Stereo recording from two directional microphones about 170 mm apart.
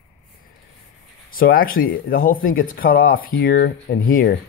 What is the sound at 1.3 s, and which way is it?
Speech, 60° left (ahead or behind).